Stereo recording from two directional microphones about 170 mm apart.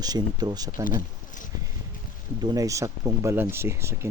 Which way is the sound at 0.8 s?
55° left (ahead or behind).